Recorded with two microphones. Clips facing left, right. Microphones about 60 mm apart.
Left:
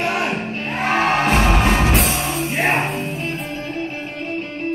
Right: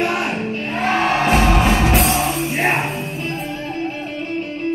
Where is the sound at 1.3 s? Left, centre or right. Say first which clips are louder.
Right 1 dB; centre.